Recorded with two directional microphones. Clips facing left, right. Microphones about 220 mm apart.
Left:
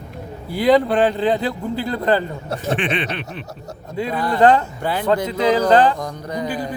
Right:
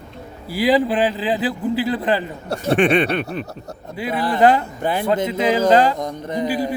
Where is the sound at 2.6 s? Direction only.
45° right (ahead or behind).